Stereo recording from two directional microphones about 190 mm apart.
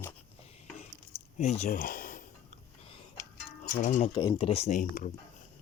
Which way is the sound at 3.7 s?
40° left (ahead or behind).